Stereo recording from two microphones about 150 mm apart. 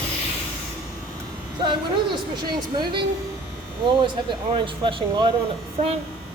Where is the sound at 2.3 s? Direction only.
30° right (ahead or behind).